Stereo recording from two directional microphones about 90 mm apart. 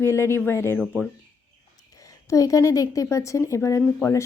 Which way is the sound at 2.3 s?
40° left (ahead or behind).